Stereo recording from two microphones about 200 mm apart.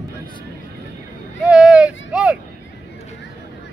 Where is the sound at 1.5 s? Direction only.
5° right (ahead or behind).